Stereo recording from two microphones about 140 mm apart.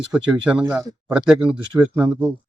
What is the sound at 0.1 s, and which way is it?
Speech, 5° right (ahead or behind).